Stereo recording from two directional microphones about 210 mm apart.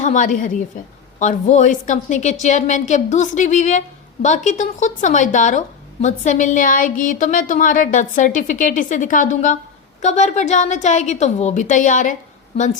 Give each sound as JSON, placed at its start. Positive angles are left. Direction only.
{"t": 0.0, "sound": "a woman's voice", "side_deg": 35}